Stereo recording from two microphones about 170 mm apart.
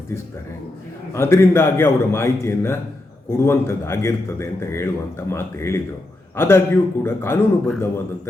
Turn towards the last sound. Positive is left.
turn(degrees=15)  # may be behind; listen again after turning